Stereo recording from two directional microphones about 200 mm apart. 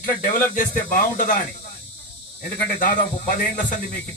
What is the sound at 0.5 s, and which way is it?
Speech, 40° left (ahead or behind).